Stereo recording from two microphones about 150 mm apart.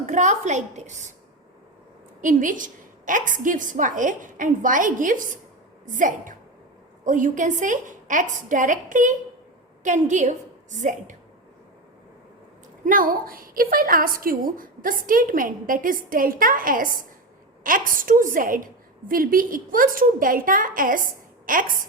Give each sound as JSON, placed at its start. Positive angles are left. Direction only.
{"t": 0.0, "sound": "a woman's voice", "side_deg": -55}
{"t": 2.2, "sound": "a woman's voice", "side_deg": -60}
{"t": 12.8, "sound": "a woman's voice", "side_deg": -65}